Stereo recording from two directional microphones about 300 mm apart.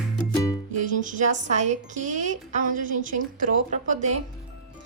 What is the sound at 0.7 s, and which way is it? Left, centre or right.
Speech, right.